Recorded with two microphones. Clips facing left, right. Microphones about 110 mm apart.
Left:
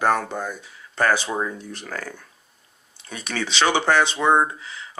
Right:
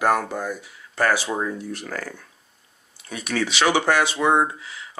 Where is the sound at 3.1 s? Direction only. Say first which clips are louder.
Right 3 dB; 30° left (ahead or behind).